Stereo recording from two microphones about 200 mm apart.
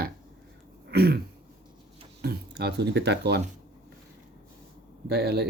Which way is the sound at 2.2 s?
55° right (ahead or behind).